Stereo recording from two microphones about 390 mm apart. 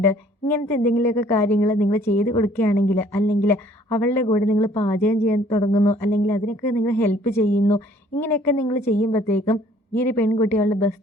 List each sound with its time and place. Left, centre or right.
0.4 s a woman's voice: centre
6.1 s a woman's voice: centre